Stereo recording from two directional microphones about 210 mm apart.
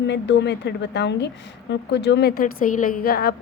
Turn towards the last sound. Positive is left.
turn(degrees=45)  # may be behind; listen again after turning